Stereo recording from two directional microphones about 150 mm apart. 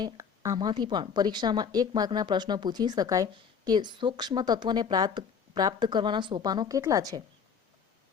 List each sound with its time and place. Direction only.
0.0 s a woman's voice: 25° right (ahead or behind)